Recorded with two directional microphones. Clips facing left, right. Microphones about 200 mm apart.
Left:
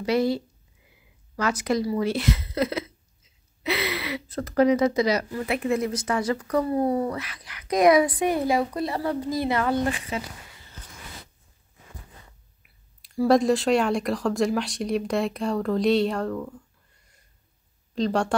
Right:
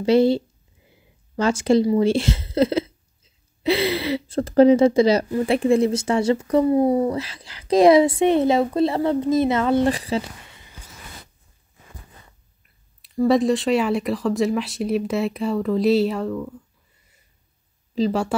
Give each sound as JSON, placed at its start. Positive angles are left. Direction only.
{"t": 0.0, "sound": "speech", "side_deg": -25}
{"t": 9.8, "sound": "speech", "side_deg": -35}
{"t": 12.6, "sound": "speech", "side_deg": 0}
{"t": 17.9, "sound": "speech", "side_deg": -5}